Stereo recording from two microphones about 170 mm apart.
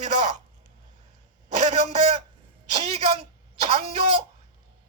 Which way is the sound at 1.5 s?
45° right (ahead or behind).